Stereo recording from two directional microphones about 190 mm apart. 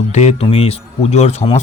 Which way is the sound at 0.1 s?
35° left (ahead or behind).